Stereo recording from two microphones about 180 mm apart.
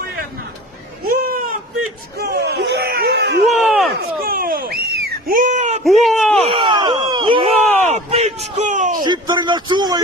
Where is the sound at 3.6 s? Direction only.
Centre (ahead or behind).